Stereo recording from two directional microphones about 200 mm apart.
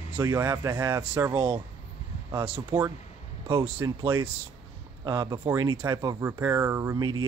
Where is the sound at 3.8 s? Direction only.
15° right (ahead or behind).